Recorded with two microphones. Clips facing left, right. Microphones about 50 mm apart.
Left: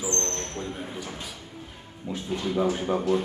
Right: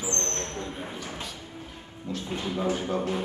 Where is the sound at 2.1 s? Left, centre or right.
Centre.